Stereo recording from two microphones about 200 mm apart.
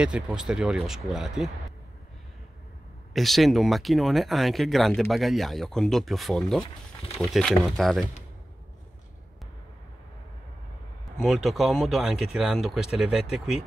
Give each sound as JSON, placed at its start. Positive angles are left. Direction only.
{"t": 0.0, "sound": "speech", "side_deg": -5}
{"t": 3.1, "sound": "speech", "side_deg": 0}
{"t": 11.2, "sound": "speech", "side_deg": 0}